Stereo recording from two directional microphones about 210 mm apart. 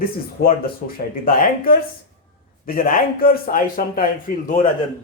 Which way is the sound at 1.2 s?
45° left (ahead or behind).